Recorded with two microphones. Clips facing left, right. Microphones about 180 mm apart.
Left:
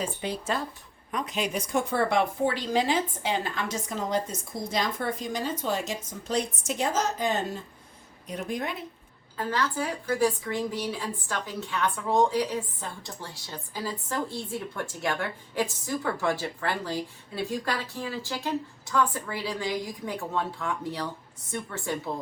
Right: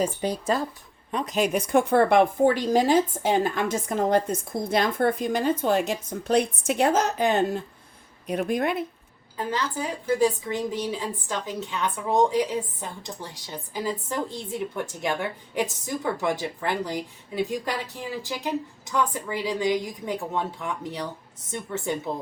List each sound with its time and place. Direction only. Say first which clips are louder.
0.0 s speech: right 6 dB; 40° right (ahead or behind); by 8.8 s 60° right (ahead or behind)
9.4 s a woman's voice: even; 20° right (ahead or behind)